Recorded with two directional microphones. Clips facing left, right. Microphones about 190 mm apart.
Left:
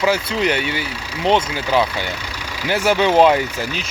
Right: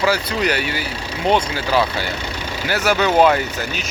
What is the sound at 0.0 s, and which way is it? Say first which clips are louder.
Speech: left 1 dB; 25° left (ahead or behind).